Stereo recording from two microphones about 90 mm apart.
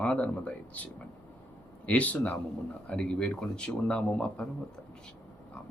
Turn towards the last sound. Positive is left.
turn(degrees=10)  # may be behind; listen again after turning